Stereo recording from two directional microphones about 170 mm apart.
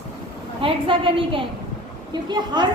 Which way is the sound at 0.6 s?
30° right (ahead or behind).